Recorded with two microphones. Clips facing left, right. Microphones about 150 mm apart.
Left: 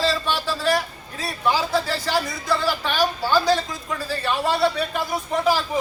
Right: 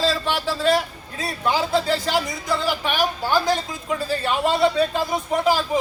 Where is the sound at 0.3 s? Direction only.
20° right (ahead or behind).